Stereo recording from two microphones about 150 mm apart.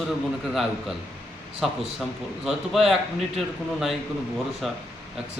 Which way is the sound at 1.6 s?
Centre (ahead or behind).